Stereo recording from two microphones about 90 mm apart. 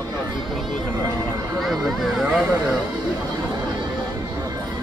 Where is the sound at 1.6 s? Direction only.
Centre (ahead or behind).